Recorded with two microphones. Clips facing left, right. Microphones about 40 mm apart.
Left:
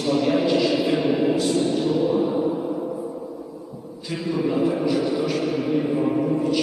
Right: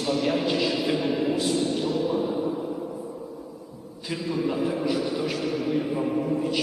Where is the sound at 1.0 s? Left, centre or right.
Centre.